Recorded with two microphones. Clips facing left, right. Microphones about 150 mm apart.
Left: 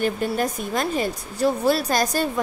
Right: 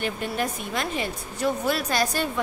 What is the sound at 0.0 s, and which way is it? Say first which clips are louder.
A woman's voice: left 5 dB; 40° left (ahead or behind).